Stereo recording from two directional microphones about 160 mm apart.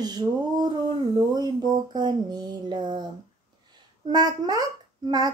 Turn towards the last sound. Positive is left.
turn(degrees=-25)  # may be behind; listen again after turning